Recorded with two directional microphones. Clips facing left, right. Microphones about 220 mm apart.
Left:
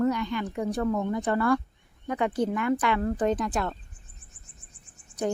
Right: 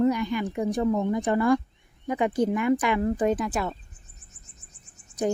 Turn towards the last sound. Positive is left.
turn(degrees=-40)  # may be behind; listen again after turning